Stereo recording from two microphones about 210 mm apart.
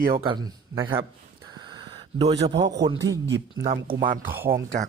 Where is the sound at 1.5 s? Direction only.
20° right (ahead or behind).